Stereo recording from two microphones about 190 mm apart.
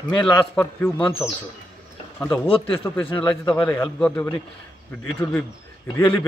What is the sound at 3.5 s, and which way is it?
Speech, 5° left (ahead or behind).